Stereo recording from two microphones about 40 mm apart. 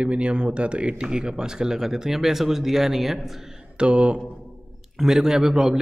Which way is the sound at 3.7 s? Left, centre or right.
Right.